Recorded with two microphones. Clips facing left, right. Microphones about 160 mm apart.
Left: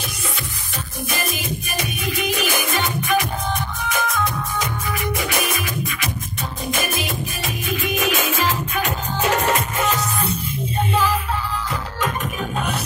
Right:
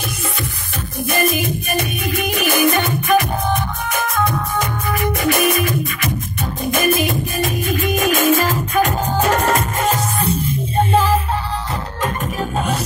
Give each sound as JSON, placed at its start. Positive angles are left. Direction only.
{"t": 1.1, "sound": "music", "side_deg": -55}